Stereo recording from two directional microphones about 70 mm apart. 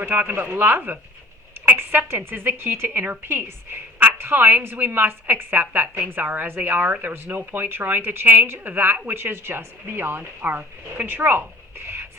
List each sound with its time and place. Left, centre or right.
0.0 s a woman's voice: right